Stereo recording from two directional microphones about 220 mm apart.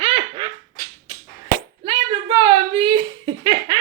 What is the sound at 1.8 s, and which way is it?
Speech, 20° right (ahead or behind).